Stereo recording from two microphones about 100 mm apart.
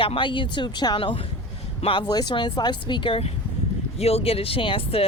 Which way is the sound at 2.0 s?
40° left (ahead or behind).